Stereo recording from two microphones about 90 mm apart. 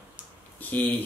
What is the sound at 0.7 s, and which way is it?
Speech, 20° left (ahead or behind).